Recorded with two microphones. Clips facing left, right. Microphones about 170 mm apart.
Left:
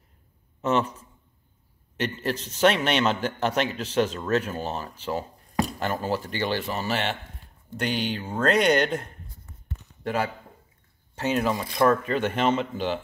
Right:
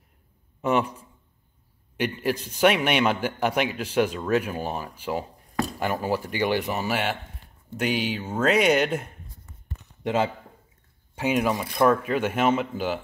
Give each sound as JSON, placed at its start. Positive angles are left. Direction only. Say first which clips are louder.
{"t": 0.6, "sound": "a sound", "louder": "right 1 dB", "side_deg": -10}
{"t": 2.0, "sound": "a man's voice", "louder": "right 2 dB", "side_deg": -10}
{"t": 10.0, "sound": "speech", "louder": "right 3 dB", "side_deg": -25}
{"t": 11.1, "sound": "a man's voice", "louder": "right 1 dB", "side_deg": -10}